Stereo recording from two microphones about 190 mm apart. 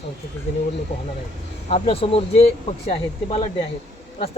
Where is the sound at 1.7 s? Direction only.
30° left (ahead or behind).